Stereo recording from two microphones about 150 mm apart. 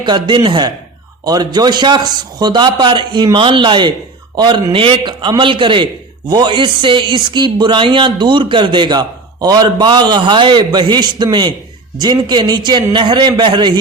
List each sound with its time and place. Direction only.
0.0 s a man's voice: 30° right (ahead or behind)